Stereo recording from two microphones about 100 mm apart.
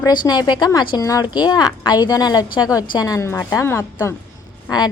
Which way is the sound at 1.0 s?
35° left (ahead or behind).